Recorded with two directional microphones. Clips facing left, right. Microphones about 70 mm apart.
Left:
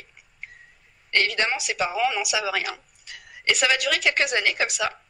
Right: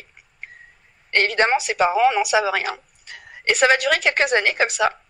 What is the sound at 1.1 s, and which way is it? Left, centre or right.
A woman's voice, right.